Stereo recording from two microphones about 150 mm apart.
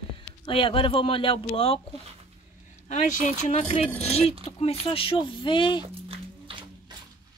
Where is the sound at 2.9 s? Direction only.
55° left (ahead or behind); by 5.8 s 35° left (ahead or behind).